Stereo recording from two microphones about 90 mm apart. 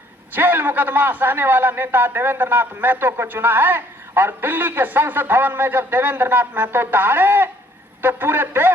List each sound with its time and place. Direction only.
0.3 s a man's voice: 20° right (ahead or behind)